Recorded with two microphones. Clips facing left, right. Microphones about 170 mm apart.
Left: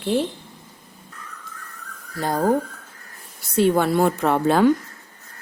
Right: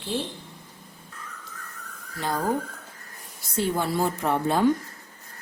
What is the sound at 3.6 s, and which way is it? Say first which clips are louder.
A woman's voice: left 7 dB; 70° left (ahead or behind).